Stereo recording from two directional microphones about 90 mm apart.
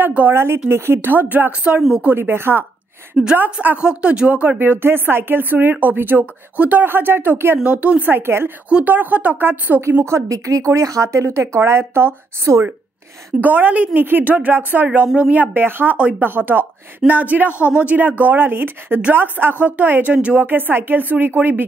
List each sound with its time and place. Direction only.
0.0 s speech: 20° right (ahead or behind)
7.6 s speech: 15° right (ahead or behind)
8.6 s speech: 15° right (ahead or behind)
13.4 s speech: 20° right (ahead or behind)